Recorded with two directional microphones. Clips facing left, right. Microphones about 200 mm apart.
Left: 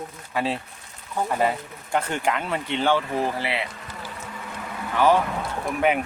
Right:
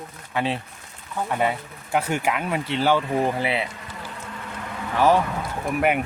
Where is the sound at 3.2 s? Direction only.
20° right (ahead or behind).